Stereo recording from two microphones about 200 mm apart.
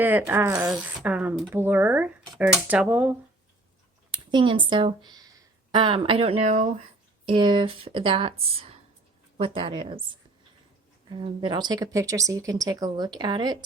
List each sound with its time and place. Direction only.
0.0 s speech: 10° right (ahead or behind)
4.1 s speech: 25° right (ahead or behind)
7.3 s speech: 25° right (ahead or behind)
11.1 s speech: 20° right (ahead or behind)